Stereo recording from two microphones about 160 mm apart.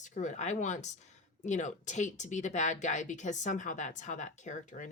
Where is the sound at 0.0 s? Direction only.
50° left (ahead or behind).